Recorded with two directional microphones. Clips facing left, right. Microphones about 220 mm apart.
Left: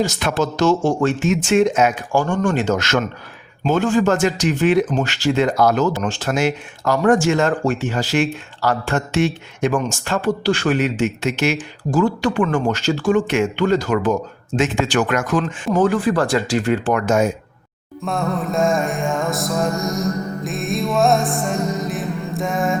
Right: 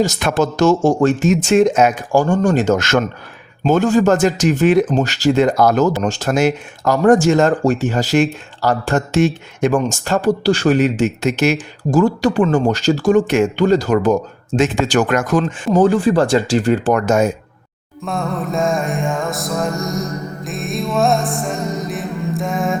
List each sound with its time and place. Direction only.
0.2 s speech: 50° right (ahead or behind)
18.0 s music: centre (ahead or behind)